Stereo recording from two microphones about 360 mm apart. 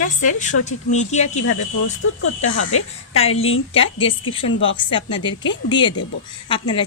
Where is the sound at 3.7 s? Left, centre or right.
Centre.